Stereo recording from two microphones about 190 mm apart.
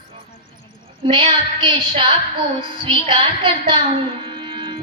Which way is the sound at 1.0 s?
25° right (ahead or behind).